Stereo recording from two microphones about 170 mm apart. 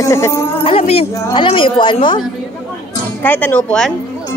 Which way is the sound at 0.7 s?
35° left (ahead or behind).